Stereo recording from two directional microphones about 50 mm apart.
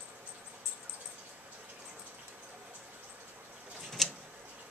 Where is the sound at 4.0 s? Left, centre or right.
Centre.